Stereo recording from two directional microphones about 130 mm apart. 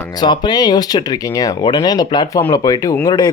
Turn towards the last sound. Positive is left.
turn(degrees=30)  # may be behind; listen again after turning